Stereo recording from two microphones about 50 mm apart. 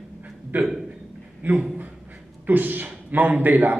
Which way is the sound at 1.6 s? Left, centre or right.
Right.